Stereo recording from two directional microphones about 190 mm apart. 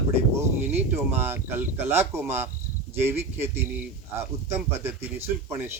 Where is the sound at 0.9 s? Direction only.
10° right (ahead or behind).